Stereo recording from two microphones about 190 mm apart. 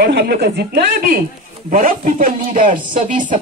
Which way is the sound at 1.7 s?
45° right (ahead or behind).